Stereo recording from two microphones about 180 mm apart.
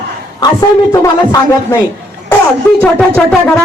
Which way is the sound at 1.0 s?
20° left (ahead or behind).